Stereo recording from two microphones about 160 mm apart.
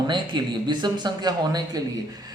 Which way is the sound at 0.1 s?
25° right (ahead or behind).